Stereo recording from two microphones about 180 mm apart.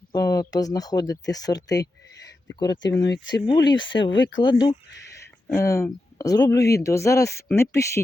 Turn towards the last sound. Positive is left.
turn(degrees=15)  # may be behind; listen again after turning